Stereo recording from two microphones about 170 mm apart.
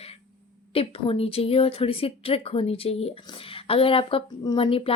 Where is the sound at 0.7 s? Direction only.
35° left (ahead or behind).